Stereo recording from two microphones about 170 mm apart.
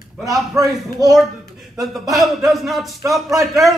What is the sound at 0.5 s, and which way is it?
Speech, 20° right (ahead or behind).